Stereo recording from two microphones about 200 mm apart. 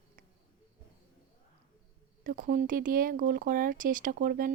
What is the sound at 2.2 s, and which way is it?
Speech, 40° right (ahead or behind).